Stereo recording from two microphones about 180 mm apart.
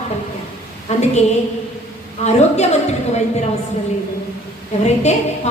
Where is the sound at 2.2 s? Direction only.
40° left (ahead or behind).